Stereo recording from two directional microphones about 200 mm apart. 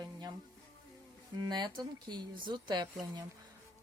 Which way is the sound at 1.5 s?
20° right (ahead or behind).